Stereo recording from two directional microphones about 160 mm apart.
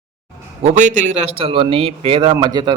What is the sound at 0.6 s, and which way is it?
A man's voice, 50° right (ahead or behind).